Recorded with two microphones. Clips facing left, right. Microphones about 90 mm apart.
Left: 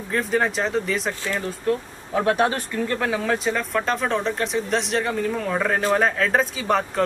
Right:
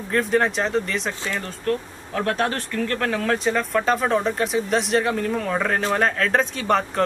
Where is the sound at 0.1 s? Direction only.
Centre (ahead or behind).